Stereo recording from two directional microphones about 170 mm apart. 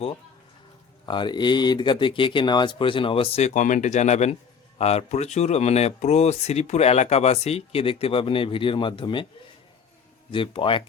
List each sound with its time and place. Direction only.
1.0 s speech: 25° left (ahead or behind)
10.3 s speech: 30° left (ahead or behind)